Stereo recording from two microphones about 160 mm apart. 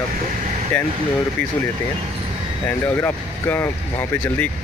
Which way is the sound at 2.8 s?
15° left (ahead or behind).